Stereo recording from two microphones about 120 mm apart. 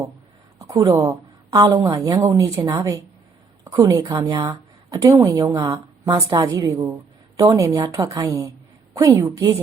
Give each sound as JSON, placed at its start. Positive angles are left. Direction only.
{"t": 0.6, "sound": "a woman's voice", "side_deg": -30}
{"t": 4.1, "sound": "a woman's voice", "side_deg": -40}
{"t": 4.4, "sound": "speech", "side_deg": -25}
{"t": 6.1, "sound": "a woman's voice", "side_deg": -30}